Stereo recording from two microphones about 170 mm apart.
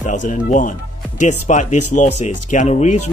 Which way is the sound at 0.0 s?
45° left (ahead or behind).